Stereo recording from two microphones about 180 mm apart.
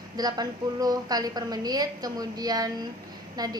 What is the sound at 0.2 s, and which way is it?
A woman's voice, 20° right (ahead or behind).